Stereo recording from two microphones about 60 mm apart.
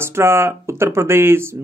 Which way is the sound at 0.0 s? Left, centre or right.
Right.